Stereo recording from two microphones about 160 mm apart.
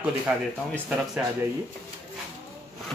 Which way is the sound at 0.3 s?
10° right (ahead or behind).